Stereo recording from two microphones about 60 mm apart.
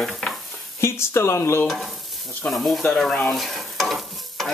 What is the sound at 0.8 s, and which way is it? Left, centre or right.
Speech, left.